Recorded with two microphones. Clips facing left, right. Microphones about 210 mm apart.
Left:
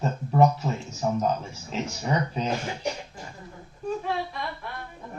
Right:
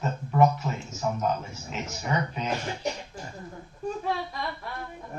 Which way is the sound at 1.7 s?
35° left (ahead or behind).